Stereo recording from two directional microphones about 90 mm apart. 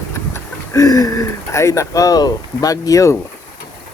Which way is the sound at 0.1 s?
35° left (ahead or behind).